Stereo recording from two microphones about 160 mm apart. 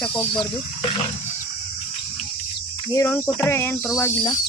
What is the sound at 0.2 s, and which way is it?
Speech, 35° left (ahead or behind).